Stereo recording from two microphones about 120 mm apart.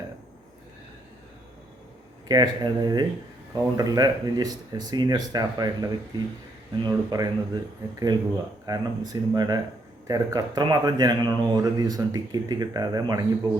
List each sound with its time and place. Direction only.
2.2 s speech: 35° right (ahead or behind)